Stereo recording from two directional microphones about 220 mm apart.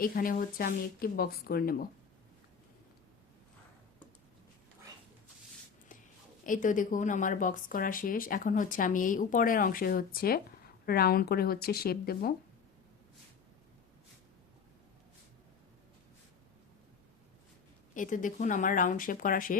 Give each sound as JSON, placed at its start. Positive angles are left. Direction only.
{"t": 0.0, "sound": "speech", "side_deg": 40}
{"t": 6.4, "sound": "speech", "side_deg": 35}
{"t": 17.9, "sound": "speech", "side_deg": 35}